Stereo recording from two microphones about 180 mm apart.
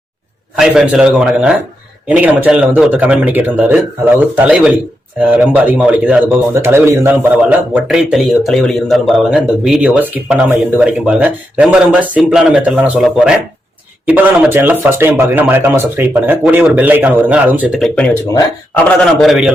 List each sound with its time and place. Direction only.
0.5 s speech: 5° right (ahead or behind)
19.2 s speech: centre (ahead or behind)